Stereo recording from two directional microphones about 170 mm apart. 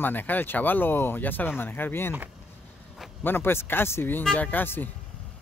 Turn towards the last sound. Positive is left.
turn(degrees=10)  # may be behind; listen again after turning